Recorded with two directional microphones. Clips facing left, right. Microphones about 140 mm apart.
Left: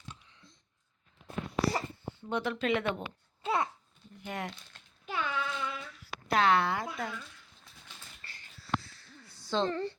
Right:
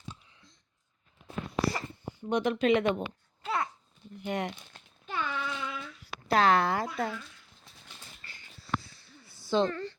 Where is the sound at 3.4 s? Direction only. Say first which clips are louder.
Left 1 dB; 20° left (ahead or behind).